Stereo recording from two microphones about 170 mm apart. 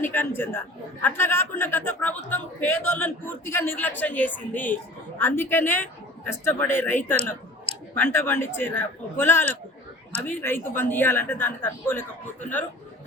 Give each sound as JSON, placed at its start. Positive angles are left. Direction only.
{"t": 0.0, "sound": "a man's voice", "side_deg": 15}